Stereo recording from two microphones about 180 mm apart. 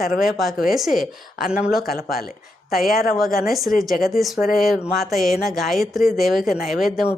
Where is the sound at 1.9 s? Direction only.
55° left (ahead or behind).